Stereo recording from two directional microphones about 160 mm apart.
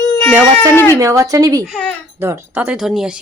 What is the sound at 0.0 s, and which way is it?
Baby cry, 15° left (ahead or behind).